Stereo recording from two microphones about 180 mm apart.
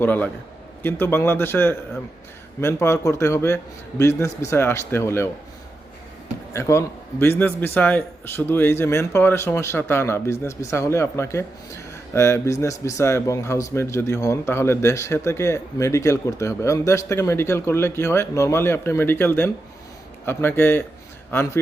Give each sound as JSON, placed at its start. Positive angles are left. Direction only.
{"t": 0.0, "sound": "a man's voice", "side_deg": 10}
{"t": 6.5, "sound": "a man's voice", "side_deg": 15}